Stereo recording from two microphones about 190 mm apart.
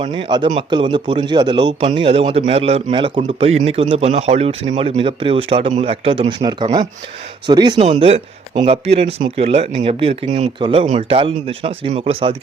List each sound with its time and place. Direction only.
0.0 s a man's voice: 25° right (ahead or behind)
7.8 s a man's voice: 30° right (ahead or behind)